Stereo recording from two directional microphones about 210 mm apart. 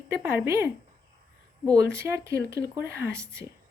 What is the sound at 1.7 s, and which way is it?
Speech, 15° right (ahead or behind).